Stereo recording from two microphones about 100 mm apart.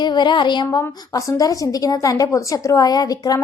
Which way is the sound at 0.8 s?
30° left (ahead or behind).